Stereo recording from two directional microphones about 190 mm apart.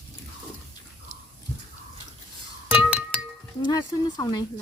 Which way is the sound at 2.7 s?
5° right (ahead or behind).